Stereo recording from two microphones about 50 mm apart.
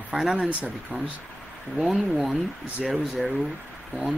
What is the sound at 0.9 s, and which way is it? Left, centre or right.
Speech, right.